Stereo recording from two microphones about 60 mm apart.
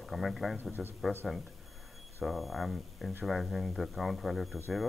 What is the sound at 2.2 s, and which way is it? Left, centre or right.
Speech, centre.